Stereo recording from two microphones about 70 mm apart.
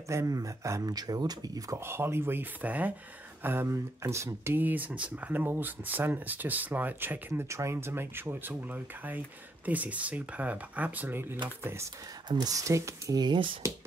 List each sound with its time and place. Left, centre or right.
0.3 s speech: right
0.9 s speech: right
1.8 s speech: right
3.4 s speech: right
4.6 s speech: right
7.4 s speech: right
12.3 s speech: right
12.5 s speech: right
13.1 s speech: right
13.6 s speech: right